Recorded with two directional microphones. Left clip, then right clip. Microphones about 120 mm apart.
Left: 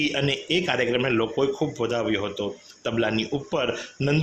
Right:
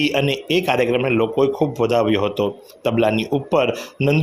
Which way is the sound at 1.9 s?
30° right (ahead or behind).